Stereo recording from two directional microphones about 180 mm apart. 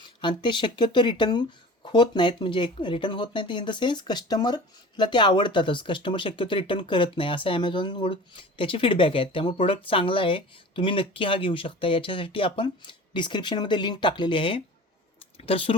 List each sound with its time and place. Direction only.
0.0 s speech: 25° left (ahead or behind)